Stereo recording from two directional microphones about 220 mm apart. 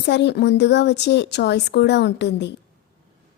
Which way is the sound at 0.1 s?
50° left (ahead or behind).